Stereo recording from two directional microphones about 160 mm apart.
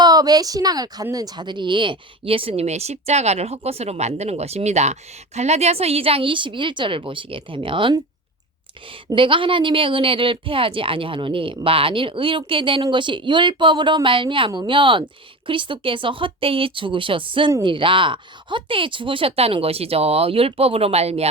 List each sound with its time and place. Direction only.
0.0 s a woman's voice: 25° right (ahead or behind)
9.0 s a woman's voice: 30° right (ahead or behind)